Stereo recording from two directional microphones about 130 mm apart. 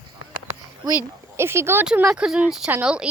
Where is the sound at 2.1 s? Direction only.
5° right (ahead or behind).